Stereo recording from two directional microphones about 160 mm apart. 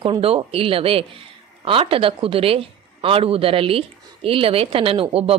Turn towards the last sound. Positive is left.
turn(degrees=-35)  # may be behind; listen again after turning